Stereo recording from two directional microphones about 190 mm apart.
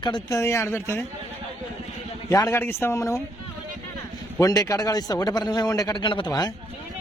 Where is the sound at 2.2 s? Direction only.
20° left (ahead or behind).